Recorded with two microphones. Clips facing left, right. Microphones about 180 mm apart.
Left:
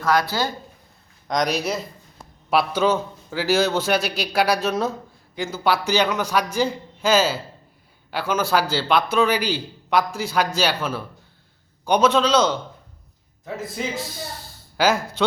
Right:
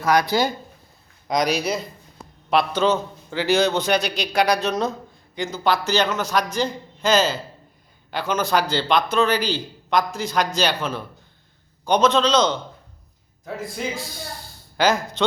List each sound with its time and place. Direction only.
0.0 s speech: 15° right (ahead or behind)
1.3 s a man's voice: centre (ahead or behind)